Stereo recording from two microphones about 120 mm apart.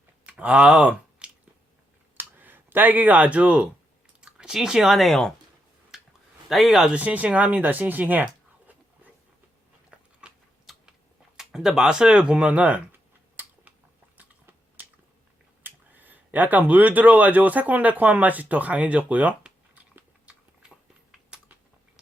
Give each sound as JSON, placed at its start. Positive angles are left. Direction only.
{"t": 0.3, "sound": "speech", "side_deg": -10}
{"t": 2.1, "sound": "a sound", "side_deg": -15}
{"t": 4.2, "sound": "speech", "side_deg": -5}
{"t": 5.9, "sound": "a sound", "side_deg": -5}
{"t": 6.5, "sound": "speech", "side_deg": 0}
{"t": 9.9, "sound": "biting", "side_deg": -10}
{"t": 11.3, "sound": "speech", "side_deg": -5}
{"t": 15.6, "sound": "speech", "side_deg": -15}
{"t": 20.0, "sound": "a sound", "side_deg": -10}